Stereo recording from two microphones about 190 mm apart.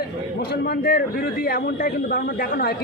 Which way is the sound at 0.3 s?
55° left (ahead or behind).